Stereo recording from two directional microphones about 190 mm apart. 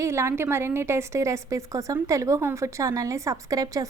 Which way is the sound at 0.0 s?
15° right (ahead or behind).